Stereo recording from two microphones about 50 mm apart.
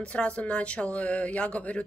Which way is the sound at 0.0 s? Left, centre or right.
Left.